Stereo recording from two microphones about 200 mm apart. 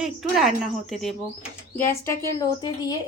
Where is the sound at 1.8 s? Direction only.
15° left (ahead or behind).